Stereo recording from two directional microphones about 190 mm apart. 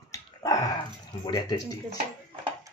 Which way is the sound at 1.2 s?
20° left (ahead or behind).